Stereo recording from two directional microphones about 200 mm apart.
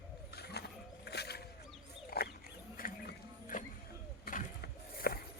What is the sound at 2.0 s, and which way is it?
Wild animals, 50° left (ahead or behind).